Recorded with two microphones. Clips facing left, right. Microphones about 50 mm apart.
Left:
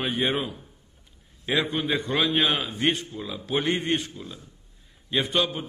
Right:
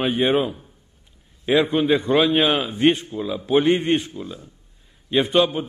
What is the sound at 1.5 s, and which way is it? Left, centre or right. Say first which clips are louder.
A man's voice: right 7 dB; right.